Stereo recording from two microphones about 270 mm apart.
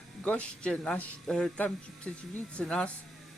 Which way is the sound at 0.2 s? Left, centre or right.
Centre.